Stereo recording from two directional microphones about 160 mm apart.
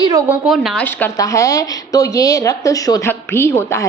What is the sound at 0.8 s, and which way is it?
A woman's voice, 15° left (ahead or behind).